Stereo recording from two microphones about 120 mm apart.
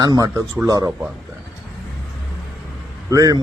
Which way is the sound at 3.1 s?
30° right (ahead or behind).